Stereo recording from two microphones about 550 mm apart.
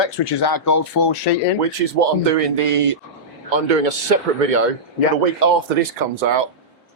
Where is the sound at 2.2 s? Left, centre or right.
Right.